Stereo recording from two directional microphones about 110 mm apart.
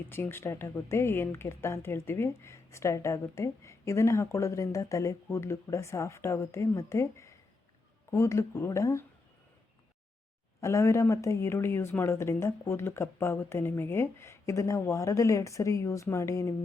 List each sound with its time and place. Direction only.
0.1 s speech: 20° left (ahead or behind)
10.6 s speech: 25° left (ahead or behind)